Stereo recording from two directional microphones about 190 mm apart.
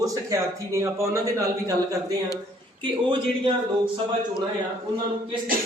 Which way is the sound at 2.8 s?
25° right (ahead or behind).